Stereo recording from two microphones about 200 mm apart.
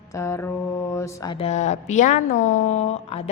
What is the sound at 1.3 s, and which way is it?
A woman's voice, 30° left (ahead or behind).